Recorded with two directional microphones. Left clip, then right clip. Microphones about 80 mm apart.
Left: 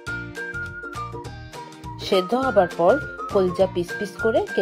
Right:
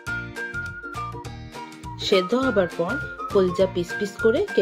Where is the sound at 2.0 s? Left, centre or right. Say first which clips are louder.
Even; left.